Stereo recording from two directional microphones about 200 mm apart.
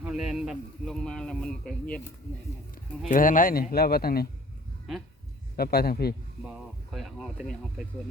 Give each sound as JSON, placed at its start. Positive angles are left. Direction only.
{"t": 0.0, "sound": "a man's voice", "side_deg": -5}
{"t": 3.1, "sound": "a man's voice", "side_deg": 40}
{"t": 5.5, "sound": "a man's voice", "side_deg": 50}
{"t": 6.4, "sound": "speech", "side_deg": -5}